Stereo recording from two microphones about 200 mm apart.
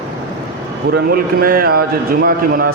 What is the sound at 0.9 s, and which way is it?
A man's voice, 45° right (ahead or behind).